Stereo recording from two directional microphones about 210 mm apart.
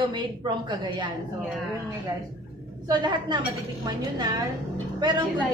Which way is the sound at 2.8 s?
20° right (ahead or behind).